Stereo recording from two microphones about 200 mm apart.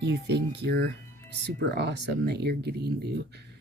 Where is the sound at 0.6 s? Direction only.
55° right (ahead or behind).